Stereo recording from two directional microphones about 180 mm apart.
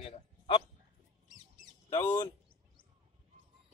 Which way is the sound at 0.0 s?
30° left (ahead or behind).